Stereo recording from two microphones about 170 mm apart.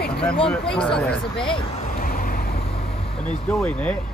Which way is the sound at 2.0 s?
60° left (ahead or behind).